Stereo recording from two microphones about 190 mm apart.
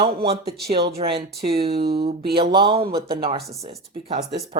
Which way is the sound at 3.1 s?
30° right (ahead or behind).